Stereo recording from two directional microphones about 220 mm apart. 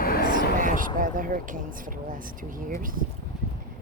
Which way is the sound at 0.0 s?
45° left (ahead or behind).